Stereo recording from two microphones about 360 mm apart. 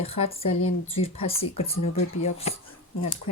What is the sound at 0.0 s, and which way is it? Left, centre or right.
Speech, centre.